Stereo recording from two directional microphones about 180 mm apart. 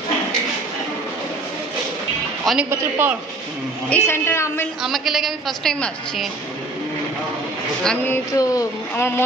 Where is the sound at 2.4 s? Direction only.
Centre (ahead or behind).